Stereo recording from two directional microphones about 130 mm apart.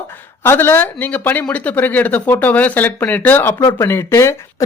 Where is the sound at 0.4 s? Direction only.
15° left (ahead or behind).